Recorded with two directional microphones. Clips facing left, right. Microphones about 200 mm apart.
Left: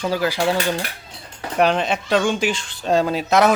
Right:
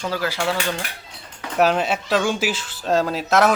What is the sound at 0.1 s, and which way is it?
Cutlery, 15° left (ahead or behind).